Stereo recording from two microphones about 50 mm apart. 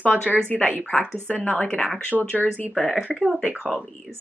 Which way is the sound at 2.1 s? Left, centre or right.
Centre.